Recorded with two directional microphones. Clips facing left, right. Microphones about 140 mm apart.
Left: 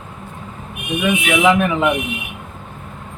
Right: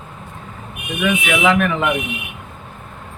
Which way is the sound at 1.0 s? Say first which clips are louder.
Left 1 dB; 20° left (ahead or behind).